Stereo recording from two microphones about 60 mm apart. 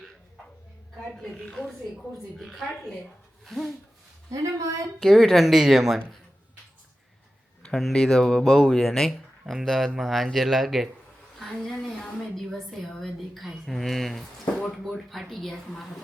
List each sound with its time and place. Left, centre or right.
1.1 s a woman's voice: centre
4.3 s a woman's voice: right
4.9 s a woman's voice: centre
7.8 s a woman's voice: centre